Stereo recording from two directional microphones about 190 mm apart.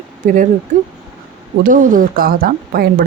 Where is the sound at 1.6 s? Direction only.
45° right (ahead or behind).